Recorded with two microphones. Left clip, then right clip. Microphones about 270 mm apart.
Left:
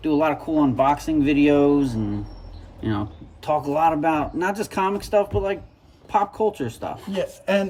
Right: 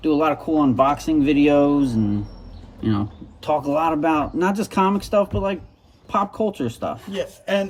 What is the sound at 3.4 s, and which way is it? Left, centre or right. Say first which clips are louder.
Speech: even; centre.